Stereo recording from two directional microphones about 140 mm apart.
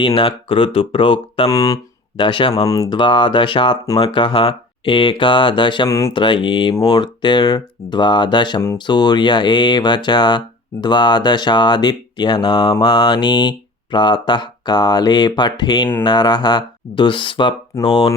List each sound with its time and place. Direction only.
0.0 s speech: 40° left (ahead or behind)
1.5 s speech: 25° left (ahead or behind)
2.6 s speech: 25° left (ahead or behind)
3.0 s speech: 35° left (ahead or behind)
5.9 s speech: 20° left (ahead or behind)
6.1 s speech: 35° left (ahead or behind)